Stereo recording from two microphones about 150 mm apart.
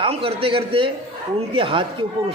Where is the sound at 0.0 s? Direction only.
40° right (ahead or behind).